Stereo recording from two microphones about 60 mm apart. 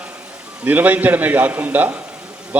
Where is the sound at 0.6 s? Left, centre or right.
Right.